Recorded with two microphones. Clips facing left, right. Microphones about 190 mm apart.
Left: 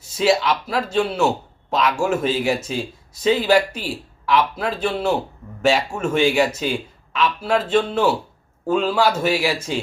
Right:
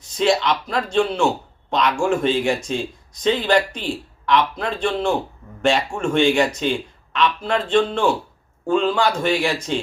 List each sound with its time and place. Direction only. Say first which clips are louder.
0.0 s a man's voice: even; 5° left (ahead or behind)